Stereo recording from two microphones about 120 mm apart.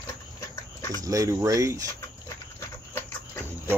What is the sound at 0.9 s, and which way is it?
Speech, 30° right (ahead or behind).